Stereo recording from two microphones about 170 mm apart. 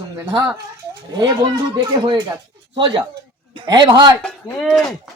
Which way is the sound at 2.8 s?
25° right (ahead or behind).